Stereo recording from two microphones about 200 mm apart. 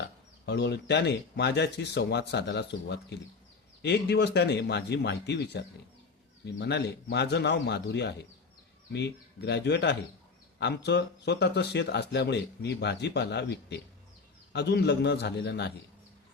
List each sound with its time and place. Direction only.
0.4 s speech: 55° left (ahead or behind)